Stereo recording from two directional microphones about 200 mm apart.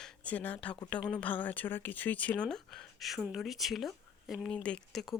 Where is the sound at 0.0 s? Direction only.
10° left (ahead or behind).